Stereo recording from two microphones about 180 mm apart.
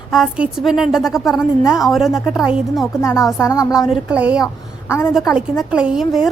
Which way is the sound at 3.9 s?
5° right (ahead or behind).